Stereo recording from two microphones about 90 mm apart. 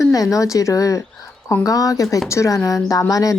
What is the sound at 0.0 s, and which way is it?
A woman's voice, 40° left (ahead or behind).